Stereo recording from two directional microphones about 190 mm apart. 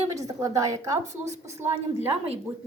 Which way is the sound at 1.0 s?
35° right (ahead or behind).